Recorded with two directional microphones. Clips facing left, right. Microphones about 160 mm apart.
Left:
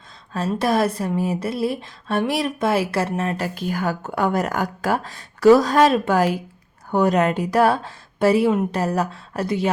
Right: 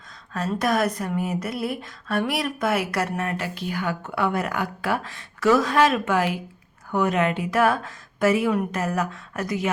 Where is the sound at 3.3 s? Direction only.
45° left (ahead or behind).